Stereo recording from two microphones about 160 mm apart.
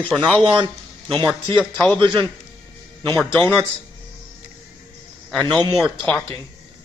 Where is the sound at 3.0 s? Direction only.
10° left (ahead or behind).